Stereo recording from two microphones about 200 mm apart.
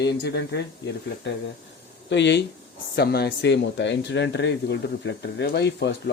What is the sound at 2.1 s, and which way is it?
Speech, 60° left (ahead or behind).